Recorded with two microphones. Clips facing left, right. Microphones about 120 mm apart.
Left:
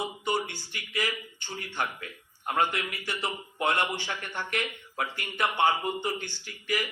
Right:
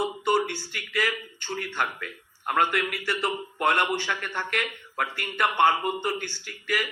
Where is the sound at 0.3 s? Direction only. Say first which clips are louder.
Right 6 dB; 55° right (ahead or behind).